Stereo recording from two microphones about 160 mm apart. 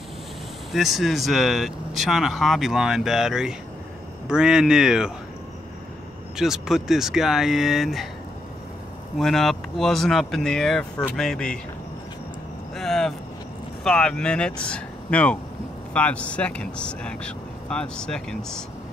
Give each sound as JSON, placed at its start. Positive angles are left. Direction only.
{"t": 0.7, "sound": "speech", "side_deg": 0}
{"t": 6.3, "sound": "speech", "side_deg": -5}
{"t": 9.2, "sound": "speech", "side_deg": 0}
{"t": 12.7, "sound": "vehicle", "side_deg": 0}
{"t": 13.8, "sound": "speech", "side_deg": 5}